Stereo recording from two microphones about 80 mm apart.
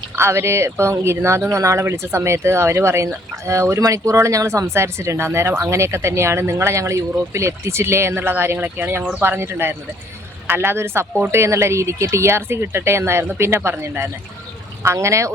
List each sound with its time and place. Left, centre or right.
0.2 s a man's voice: right
14.8 s speech: right